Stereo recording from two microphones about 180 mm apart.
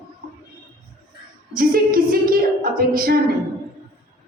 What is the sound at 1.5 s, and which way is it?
A woman's voice, 55° right (ahead or behind).